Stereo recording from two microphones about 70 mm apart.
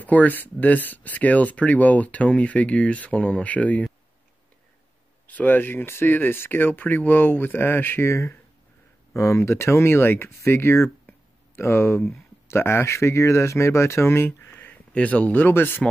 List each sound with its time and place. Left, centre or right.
0.0 s speech: left
5.2 s speech: left